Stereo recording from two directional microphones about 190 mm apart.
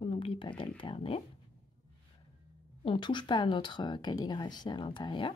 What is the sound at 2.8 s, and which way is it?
Speech, 25° left (ahead or behind).